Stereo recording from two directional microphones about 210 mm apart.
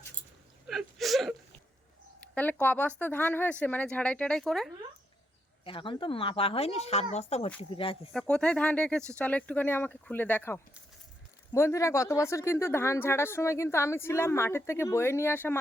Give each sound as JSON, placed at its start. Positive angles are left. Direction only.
{"t": 0.7, "sound": "whimper", "side_deg": 0}
{"t": 2.2, "sound": "speech", "side_deg": 5}
{"t": 5.6, "sound": "speech", "side_deg": 25}
{"t": 8.1, "sound": "speech", "side_deg": 5}